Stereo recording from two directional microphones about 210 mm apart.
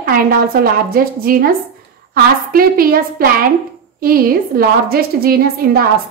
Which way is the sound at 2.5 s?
45° right (ahead or behind).